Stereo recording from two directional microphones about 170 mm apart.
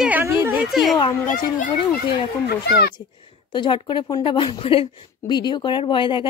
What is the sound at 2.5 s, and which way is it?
Speech, 75° left (ahead or behind).